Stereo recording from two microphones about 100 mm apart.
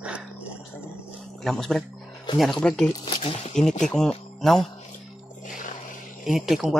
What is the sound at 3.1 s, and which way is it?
Speech, 75° left (ahead or behind).